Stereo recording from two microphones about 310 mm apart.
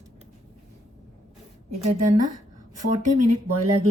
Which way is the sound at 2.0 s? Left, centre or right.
Right.